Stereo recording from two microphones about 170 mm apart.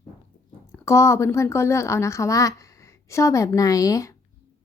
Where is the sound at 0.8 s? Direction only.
15° left (ahead or behind).